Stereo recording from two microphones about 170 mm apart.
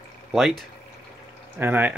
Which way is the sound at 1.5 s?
10° right (ahead or behind).